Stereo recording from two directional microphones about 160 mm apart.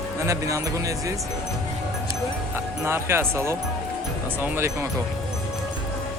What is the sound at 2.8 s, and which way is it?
Speech, 15° right (ahead or behind).